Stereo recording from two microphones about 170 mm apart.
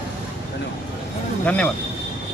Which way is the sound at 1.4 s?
10° left (ahead or behind).